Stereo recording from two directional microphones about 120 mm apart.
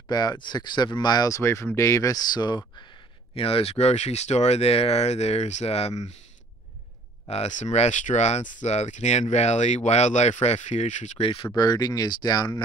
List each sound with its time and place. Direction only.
0.1 s speech: 35° left (ahead or behind)
3.3 s speech: 50° left (ahead or behind)
7.2 s speech: 70° left (ahead or behind)
11.1 s speech: 50° left (ahead or behind)
11.5 s speech: 35° left (ahead or behind)